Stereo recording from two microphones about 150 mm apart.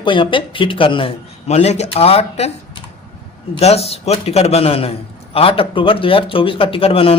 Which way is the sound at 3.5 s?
45° left (ahead or behind).